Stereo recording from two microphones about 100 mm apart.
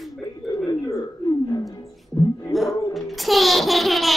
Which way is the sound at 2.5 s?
Centre (ahead or behind).